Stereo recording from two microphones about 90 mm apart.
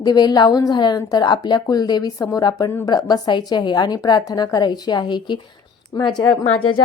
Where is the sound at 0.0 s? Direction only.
50° left (ahead or behind).